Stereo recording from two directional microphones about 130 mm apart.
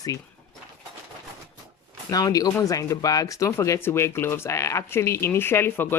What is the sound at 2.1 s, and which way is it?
Speech, 30° left (ahead or behind).